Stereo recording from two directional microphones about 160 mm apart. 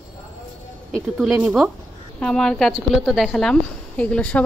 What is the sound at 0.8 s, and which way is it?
A woman's voice, centre (ahead or behind).